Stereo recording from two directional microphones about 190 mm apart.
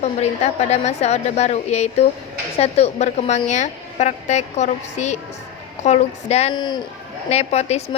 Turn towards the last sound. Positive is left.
turn(degrees=35)  # may be behind; listen again after turning